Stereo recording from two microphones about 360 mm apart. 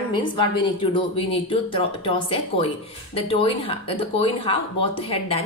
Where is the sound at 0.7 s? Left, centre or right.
Centre.